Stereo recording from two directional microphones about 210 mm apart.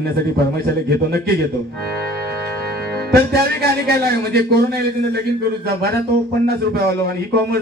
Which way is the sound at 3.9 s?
50° right (ahead or behind).